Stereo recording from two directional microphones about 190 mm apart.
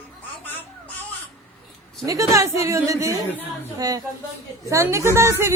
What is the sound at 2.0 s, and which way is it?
Speech, 15° right (ahead or behind).